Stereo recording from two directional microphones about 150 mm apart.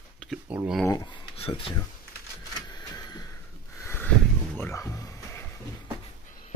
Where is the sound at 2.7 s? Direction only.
25° left (ahead or behind).